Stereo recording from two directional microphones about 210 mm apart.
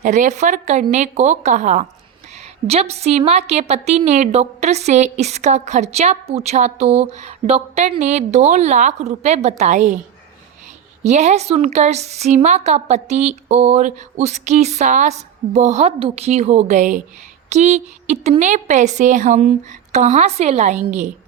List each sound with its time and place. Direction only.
0.0 s a woman's voice: 35° right (ahead or behind)
11.0 s a woman's voice: 35° right (ahead or behind)